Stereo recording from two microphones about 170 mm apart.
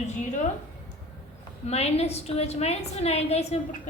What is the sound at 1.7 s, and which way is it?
A woman's voice, 40° left (ahead or behind).